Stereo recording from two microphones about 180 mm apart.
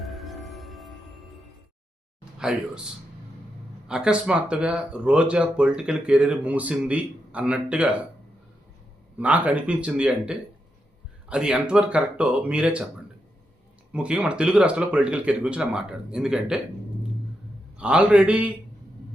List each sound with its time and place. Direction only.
0.0 s music: centre (ahead or behind)
2.4 s speech: 5° right (ahead or behind)
3.8 s speech: 5° right (ahead or behind)
9.1 s speech: 10° right (ahead or behind)
13.9 s speech: 5° right (ahead or behind)
17.7 s speech: 5° right (ahead or behind)